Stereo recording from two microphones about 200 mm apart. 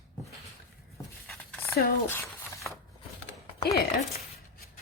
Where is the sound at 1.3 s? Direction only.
10° left (ahead or behind).